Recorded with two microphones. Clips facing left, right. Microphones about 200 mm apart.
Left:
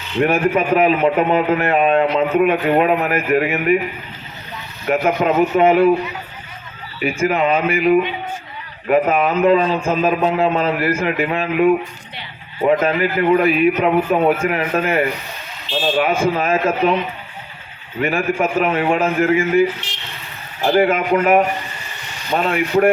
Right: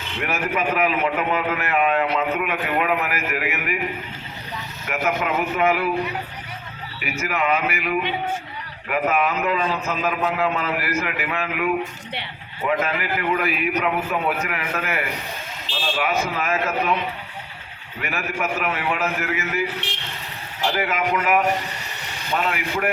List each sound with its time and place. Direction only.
0.2 s a man's voice: 30° left (ahead or behind)
4.9 s a man's voice: 30° left (ahead or behind)
7.0 s a man's voice: 30° left (ahead or behind)
16.2 s a man's voice: 30° left (ahead or behind)
18.0 s a man's voice: 30° left (ahead or behind)
20.7 s a man's voice: 30° left (ahead or behind)